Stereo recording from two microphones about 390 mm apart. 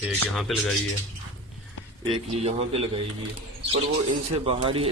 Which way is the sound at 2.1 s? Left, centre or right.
Centre.